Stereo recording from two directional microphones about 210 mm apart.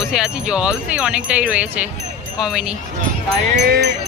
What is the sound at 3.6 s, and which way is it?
Speech, 45° right (ahead or behind).